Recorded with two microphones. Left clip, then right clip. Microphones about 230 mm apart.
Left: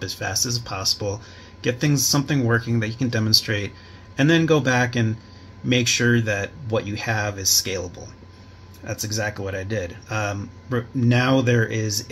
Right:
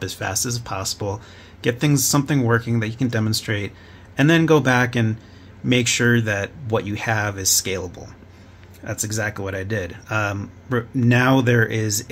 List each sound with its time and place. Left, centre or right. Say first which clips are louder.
0.0 s speech: even; right
8.8 s speech: right 1 dB; right